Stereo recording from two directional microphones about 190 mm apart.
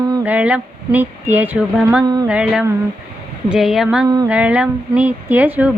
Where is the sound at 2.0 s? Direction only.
20° right (ahead or behind).